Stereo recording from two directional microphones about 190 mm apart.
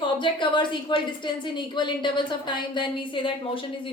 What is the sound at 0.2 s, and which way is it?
Speech, 25° left (ahead or behind).